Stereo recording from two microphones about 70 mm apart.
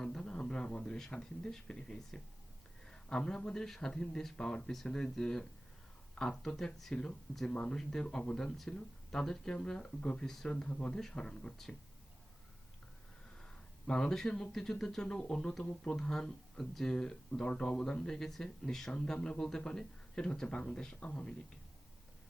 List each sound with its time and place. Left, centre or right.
0.0 s speech: centre
13.8 s speech: centre
15.6 s speech: centre
16.0 s speech: centre